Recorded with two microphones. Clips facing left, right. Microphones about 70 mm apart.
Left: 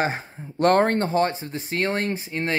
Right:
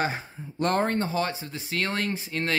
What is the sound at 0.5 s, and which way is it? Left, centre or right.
Speech, left.